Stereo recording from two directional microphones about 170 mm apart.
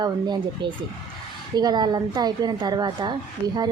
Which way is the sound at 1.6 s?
25° right (ahead or behind).